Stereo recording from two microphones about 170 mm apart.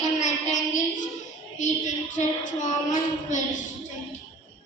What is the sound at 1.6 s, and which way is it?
Child singing, 45° left (ahead or behind).